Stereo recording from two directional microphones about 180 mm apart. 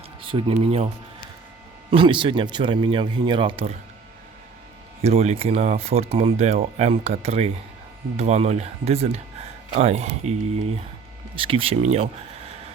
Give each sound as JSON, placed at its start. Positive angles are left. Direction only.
{"t": 0.2, "sound": "speech", "side_deg": -30}
{"t": 1.9, "sound": "speech", "side_deg": -30}
{"t": 5.0, "sound": "speech", "side_deg": -35}